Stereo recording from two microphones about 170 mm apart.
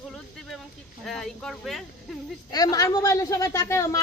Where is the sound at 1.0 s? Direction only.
Centre (ahead or behind).